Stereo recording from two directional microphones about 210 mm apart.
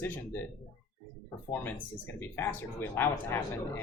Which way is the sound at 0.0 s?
10° left (ahead or behind).